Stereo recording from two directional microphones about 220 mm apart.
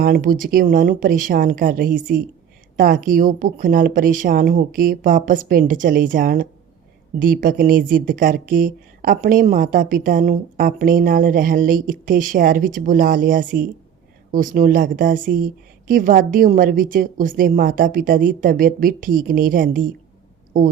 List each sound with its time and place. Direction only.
0.0 s speech: 40° right (ahead or behind)